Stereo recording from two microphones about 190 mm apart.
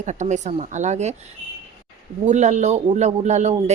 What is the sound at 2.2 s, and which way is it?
A woman's voice, 40° right (ahead or behind).